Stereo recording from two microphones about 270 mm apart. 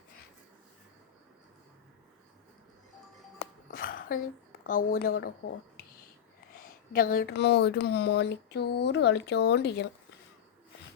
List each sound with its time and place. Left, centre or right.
3.7 s a sound: left
4.6 s speech: left
6.6 s speech: left